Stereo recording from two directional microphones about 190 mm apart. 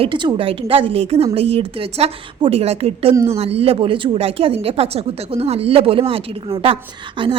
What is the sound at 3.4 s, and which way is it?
Speech, 30° right (ahead or behind).